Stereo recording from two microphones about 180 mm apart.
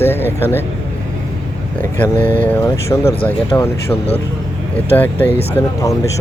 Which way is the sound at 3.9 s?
35° left (ahead or behind).